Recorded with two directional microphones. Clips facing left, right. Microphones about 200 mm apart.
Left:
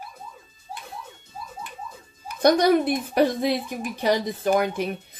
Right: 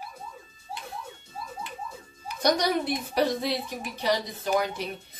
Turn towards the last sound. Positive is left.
turn(degrees=55)  # may be behind; listen again after turning